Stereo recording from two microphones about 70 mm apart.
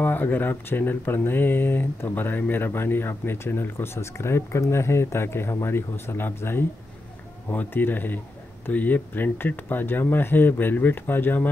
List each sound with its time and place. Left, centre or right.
0.0 s speech: left